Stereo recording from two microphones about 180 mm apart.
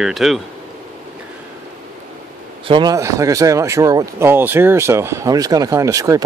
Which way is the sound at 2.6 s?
25° right (ahead or behind).